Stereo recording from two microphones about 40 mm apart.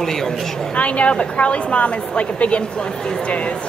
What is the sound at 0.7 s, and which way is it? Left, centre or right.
A woman's voice, left.